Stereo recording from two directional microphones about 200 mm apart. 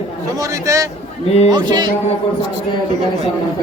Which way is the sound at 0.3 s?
15° right (ahead or behind).